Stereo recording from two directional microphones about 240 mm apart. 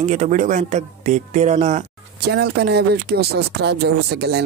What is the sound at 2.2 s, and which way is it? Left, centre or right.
Speech, right.